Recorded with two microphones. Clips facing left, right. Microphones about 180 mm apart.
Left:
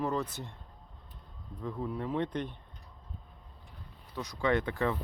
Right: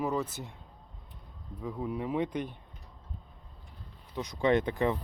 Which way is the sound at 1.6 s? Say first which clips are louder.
Right 1 dB; 10° right (ahead or behind).